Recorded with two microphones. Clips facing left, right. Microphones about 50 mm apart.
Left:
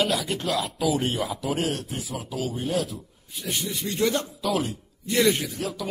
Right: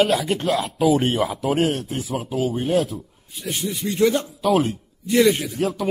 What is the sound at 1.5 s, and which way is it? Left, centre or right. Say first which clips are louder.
A man's voice: right 7 dB; right.